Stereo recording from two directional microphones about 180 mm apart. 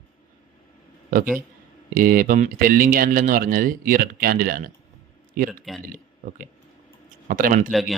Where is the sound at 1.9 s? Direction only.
50° right (ahead or behind).